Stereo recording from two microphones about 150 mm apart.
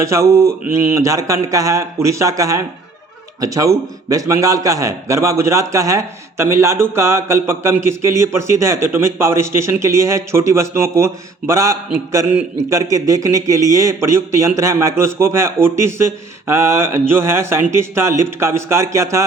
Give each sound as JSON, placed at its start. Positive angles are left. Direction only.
{"t": 0.0, "sound": "a man's voice", "side_deg": -20}